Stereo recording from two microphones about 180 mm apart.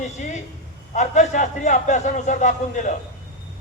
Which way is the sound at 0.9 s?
40° left (ahead or behind).